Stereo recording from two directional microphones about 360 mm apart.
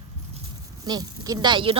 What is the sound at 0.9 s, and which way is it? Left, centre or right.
Speech, centre.